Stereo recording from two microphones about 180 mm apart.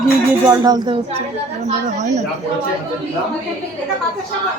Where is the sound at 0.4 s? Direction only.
20° right (ahead or behind).